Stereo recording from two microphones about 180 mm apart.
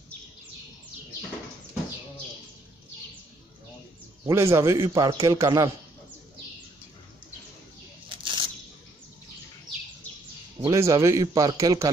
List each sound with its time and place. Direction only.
4.3 s a man's voice: 15° right (ahead or behind)
8.2 s a sound: 25° right (ahead or behind)
10.6 s a man's voice: 15° right (ahead or behind)